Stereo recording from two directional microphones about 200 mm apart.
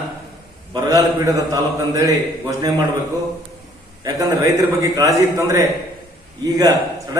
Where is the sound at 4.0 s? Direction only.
15° right (ahead or behind).